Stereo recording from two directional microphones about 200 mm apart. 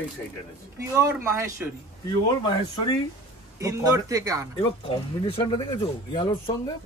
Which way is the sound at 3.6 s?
15° right (ahead or behind).